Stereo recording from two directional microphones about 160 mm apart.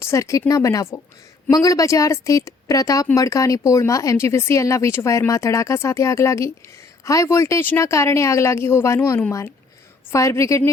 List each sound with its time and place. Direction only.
0.0 s speech: 20° left (ahead or behind)